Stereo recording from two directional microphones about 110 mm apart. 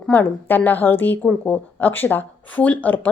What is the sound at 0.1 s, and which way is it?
A woman's voice, 15° left (ahead or behind).